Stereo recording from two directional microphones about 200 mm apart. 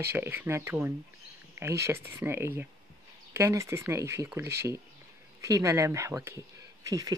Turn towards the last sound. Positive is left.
turn(degrees=-15)  # may be behind; listen again after turning